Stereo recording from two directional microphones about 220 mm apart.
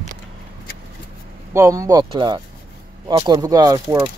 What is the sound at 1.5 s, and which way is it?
Speech, 15° right (ahead or behind).